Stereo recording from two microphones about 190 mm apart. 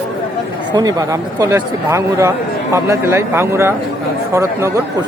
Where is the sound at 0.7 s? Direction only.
20° right (ahead or behind).